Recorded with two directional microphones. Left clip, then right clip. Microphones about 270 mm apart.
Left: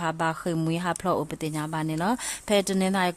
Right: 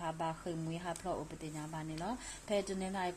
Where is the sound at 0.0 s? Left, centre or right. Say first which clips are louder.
Left 12 dB; left.